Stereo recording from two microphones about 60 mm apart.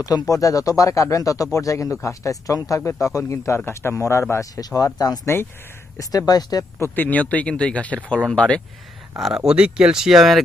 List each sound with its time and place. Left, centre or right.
0.0 s speech: left
3.3 s speech: left
4.5 s speech: left
5.2 s speech: left
6.0 s speech: left
6.9 s speech: left
9.1 s speech: centre